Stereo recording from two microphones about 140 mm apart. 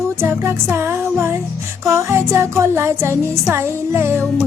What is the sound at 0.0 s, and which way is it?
Music, 20° right (ahead or behind).